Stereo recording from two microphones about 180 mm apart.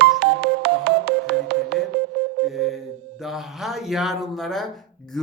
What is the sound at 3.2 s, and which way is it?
Speech, centre (ahead or behind).